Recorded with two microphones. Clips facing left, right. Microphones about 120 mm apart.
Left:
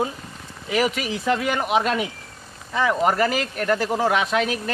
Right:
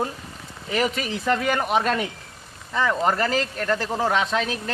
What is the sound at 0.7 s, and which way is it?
Speech, 5° left (ahead or behind).